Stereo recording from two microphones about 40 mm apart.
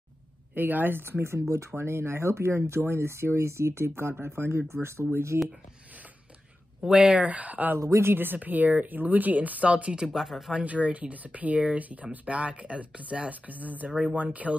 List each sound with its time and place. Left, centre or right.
0.6 s speech: right
6.8 s speech: centre
7.2 s speech: right
7.7 s speech: right
8.4 s speech: right
9.7 s speech: right
10.0 s speech: centre
10.5 s speech: right